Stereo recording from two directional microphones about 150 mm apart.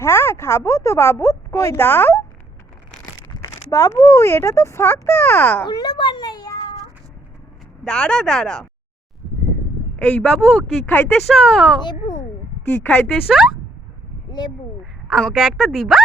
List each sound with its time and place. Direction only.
0.0 s a woman's voice: 15° left (ahead or behind)
3.3 s speech: 20° left (ahead or behind)
5.6 s a child's voice: 25° left (ahead or behind)
7.9 s speech: 5° left (ahead or behind)
10.0 s speech: 5° left (ahead or behind)
12.7 s speech: 10° left (ahead or behind)
13.2 s speech: 5° right (ahead or behind)
14.3 s speech: 30° left (ahead or behind)
15.1 s speech: centre (ahead or behind)